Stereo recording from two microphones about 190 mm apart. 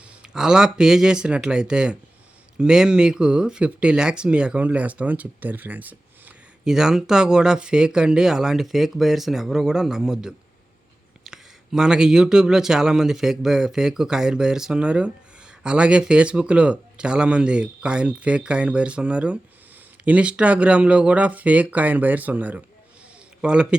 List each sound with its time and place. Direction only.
0.2 s a man's voice: 5° right (ahead or behind)